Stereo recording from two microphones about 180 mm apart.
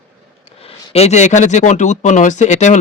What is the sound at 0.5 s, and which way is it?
Speech, 35° left (ahead or behind).